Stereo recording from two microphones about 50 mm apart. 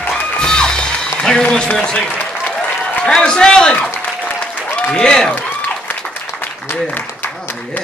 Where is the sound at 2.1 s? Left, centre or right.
Centre.